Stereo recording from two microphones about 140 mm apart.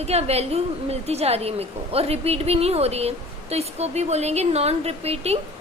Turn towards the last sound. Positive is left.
turn(degrees=-45)  # may be behind; listen again after turning